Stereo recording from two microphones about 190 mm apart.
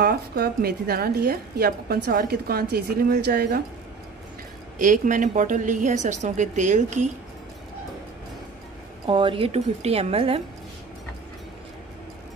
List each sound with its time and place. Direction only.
0.0 s a woman's voice: 55° right (ahead or behind)
4.7 s a woman's voice: 45° right (ahead or behind)
9.0 s a woman's voice: 25° right (ahead or behind)